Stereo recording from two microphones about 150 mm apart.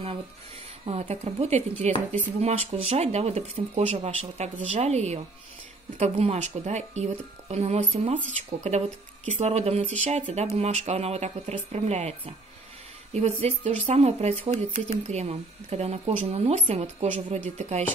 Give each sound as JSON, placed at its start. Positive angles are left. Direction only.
{"t": 0.8, "sound": "speech", "side_deg": -40}